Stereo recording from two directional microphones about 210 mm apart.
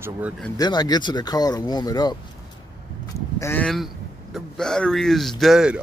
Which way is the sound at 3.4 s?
10° left (ahead or behind).